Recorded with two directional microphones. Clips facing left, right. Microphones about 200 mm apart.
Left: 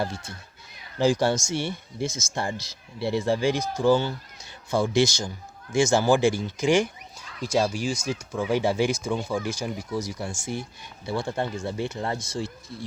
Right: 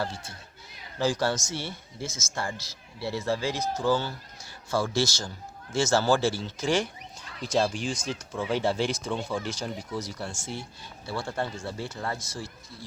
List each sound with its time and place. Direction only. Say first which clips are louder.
0.9 s speech: left 5 dB; 15° left (ahead or behind)